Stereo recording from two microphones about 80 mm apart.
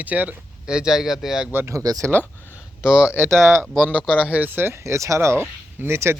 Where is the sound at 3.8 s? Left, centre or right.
Right.